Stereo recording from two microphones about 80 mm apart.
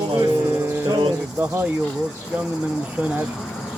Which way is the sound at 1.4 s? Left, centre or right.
Right.